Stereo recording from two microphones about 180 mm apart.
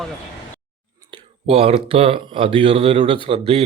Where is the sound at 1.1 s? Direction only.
30° right (ahead or behind).